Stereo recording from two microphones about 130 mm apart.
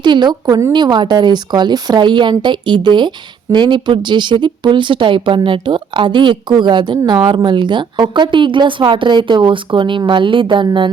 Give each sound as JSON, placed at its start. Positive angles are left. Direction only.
{"t": 0.0, "sound": "a woman's voice", "side_deg": -35}